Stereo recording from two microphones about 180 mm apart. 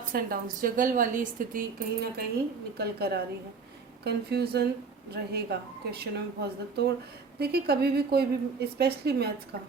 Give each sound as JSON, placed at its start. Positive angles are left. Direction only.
{"t": 0.1, "sound": "speech", "side_deg": -55}